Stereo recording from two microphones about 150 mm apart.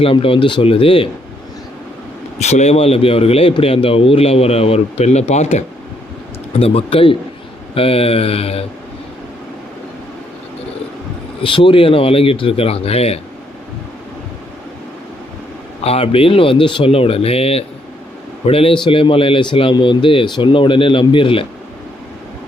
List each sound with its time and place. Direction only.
0.0 s a man's voice: 35° left (ahead or behind)
2.4 s a man's voice: 50° left (ahead or behind)
11.4 s a man's voice: 35° left (ahead or behind)
15.8 s a man's voice: 40° left (ahead or behind)